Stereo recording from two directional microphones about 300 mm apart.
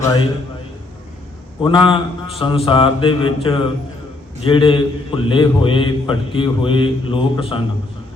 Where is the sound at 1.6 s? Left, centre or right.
Centre.